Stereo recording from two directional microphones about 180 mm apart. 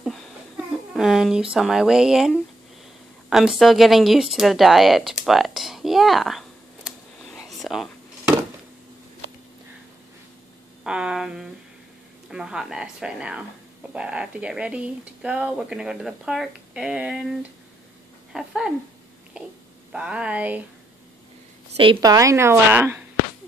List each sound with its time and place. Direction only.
0.9 s speech: centre (ahead or behind)
3.3 s a sound: centre (ahead or behind)
10.8 s speech: 5° right (ahead or behind)
19.9 s a woman's voice: 5° right (ahead or behind)
21.7 s a woman's voice: 25° right (ahead or behind)